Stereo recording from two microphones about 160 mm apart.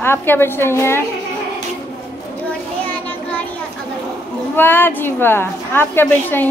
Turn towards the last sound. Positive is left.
turn(degrees=15)  # may be behind; listen again after turning